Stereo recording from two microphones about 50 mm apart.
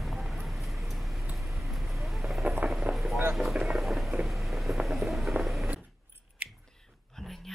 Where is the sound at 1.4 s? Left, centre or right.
Centre.